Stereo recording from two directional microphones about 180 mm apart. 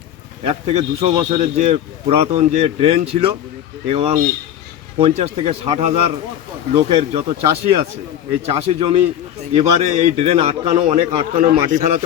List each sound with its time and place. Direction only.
0.4 s speech: 35° right (ahead or behind)